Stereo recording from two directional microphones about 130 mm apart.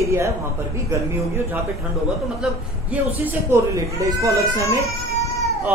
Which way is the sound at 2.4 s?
5° right (ahead or behind).